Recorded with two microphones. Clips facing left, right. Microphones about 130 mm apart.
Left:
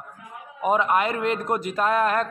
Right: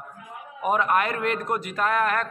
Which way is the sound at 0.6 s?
20° left (ahead or behind).